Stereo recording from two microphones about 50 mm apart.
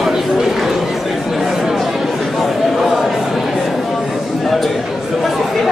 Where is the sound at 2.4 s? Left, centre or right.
Centre.